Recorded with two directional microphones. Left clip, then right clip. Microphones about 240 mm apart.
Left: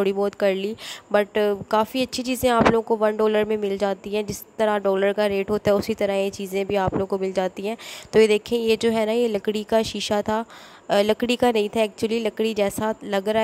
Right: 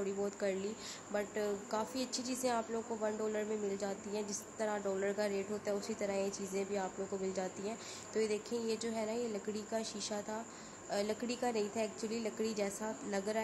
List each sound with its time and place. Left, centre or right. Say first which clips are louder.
0.0 s speech: left 16 dB; left